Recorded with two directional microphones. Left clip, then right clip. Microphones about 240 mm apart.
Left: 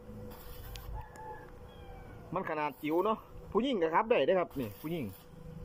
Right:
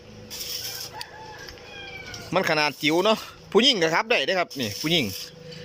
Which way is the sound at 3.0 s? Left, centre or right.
Right.